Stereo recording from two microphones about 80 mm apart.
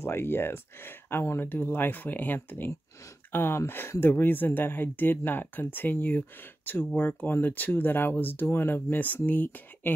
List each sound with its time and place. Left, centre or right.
0.0 s speech: left